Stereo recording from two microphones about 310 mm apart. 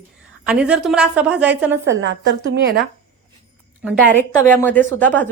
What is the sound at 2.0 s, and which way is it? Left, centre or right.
Speech, right.